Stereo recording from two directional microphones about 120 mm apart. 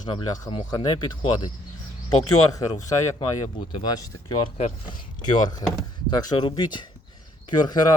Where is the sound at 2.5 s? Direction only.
30° left (ahead or behind).